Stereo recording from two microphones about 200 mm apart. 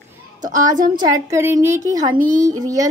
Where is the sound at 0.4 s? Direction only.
20° right (ahead or behind).